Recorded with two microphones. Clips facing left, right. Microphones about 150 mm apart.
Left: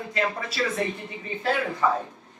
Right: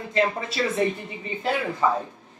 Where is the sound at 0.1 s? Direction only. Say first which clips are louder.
Right 5 dB; 25° right (ahead or behind).